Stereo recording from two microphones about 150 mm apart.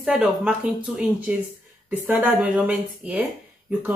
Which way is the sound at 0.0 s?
5° right (ahead or behind).